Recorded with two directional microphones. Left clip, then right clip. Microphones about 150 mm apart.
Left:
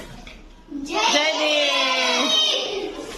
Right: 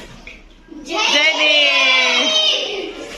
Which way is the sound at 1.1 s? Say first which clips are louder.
Right 9 dB; 15° left (ahead or behind).